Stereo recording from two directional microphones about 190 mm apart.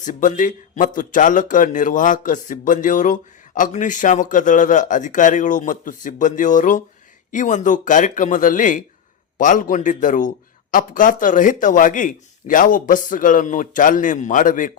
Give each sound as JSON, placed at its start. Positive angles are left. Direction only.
{"t": 0.0, "sound": "speech", "side_deg": 40}